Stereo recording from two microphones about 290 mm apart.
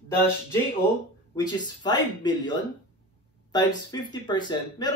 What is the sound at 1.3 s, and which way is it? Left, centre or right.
Speech, centre.